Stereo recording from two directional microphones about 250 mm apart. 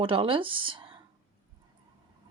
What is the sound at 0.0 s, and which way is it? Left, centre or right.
Speech, right.